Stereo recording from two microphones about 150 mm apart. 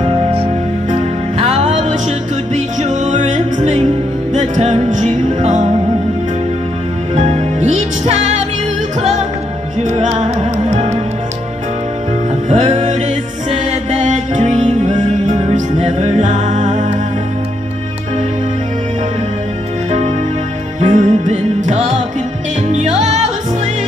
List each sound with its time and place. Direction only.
0.8 s music: 45° right (ahead or behind)
7.2 s music: 45° right (ahead or behind)
9.8 s music: 45° right (ahead or behind)
12.4 s music: 50° right (ahead or behind)
20.8 s music: 55° right (ahead or behind)